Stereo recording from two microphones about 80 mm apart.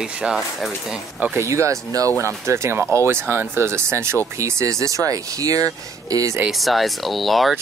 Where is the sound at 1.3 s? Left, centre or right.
Right.